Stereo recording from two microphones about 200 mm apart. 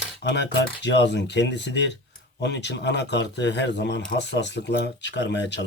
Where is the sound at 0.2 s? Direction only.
60° left (ahead or behind).